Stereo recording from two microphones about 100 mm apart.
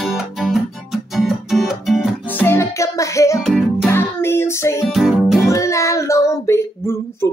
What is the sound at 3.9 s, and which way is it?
Music, 25° left (ahead or behind).